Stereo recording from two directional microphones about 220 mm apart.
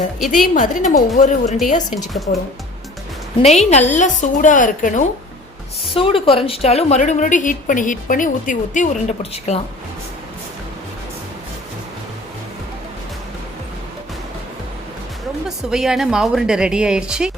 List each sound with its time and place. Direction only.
0.3 s a woman's voice: 35° left (ahead or behind)
5.9 s a woman's voice: 25° left (ahead or behind)
15.4 s a woman's voice: centre (ahead or behind)